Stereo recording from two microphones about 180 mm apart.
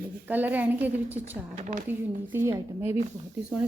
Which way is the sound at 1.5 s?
45° right (ahead or behind).